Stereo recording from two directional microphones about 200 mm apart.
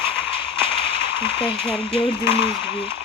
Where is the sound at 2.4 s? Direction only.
30° left (ahead or behind).